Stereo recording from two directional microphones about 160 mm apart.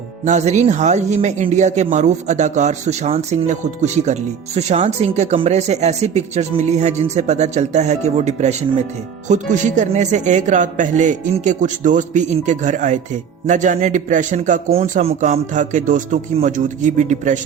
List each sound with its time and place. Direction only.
0.3 s a man's voice: 45° right (ahead or behind)
14.7 s a man's voice: 40° right (ahead or behind)